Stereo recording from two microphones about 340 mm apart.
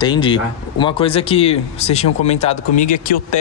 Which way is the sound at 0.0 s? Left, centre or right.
Centre.